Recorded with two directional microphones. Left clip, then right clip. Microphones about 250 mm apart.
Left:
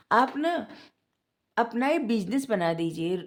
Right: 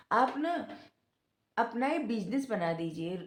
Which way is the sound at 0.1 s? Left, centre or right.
Left.